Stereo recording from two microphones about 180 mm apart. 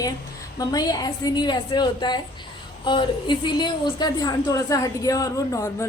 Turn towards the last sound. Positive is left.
turn(degrees=20)  # may be behind; listen again after turning